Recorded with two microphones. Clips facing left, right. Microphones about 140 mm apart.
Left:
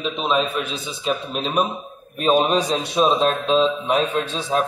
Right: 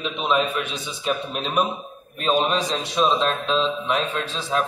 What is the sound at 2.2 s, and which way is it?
Speech, 15° left (ahead or behind).